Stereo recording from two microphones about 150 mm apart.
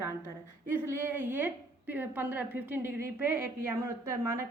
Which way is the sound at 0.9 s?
15° right (ahead or behind).